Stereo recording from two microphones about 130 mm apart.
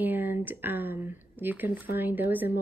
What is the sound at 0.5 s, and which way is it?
Speech, 15° right (ahead or behind).